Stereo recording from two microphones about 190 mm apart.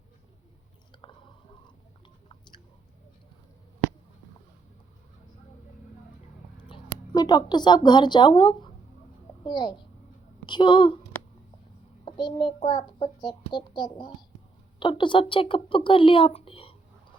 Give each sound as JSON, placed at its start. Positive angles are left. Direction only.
{"t": 1.0, "sound": "chewing", "side_deg": 25}
{"t": 7.1, "sound": "a child's voice", "side_deg": 20}
{"t": 12.0, "sound": "a child's voice", "side_deg": 25}